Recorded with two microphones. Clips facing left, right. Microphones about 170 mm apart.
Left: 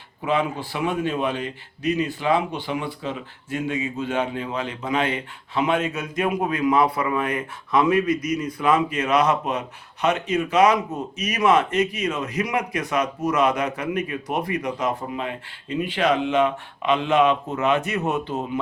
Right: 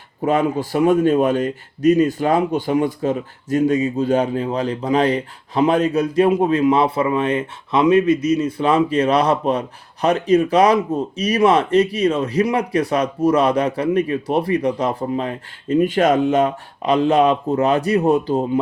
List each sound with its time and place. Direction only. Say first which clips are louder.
0.2 s a man's voice: right 6 dB; 45° right (ahead or behind)